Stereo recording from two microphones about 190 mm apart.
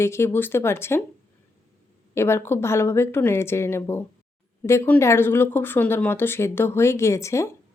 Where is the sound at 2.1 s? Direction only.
15° left (ahead or behind).